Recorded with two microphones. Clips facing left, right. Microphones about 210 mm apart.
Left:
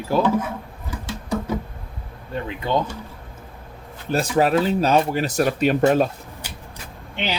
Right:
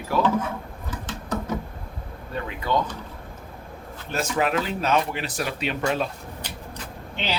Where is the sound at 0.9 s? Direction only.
10° left (ahead or behind).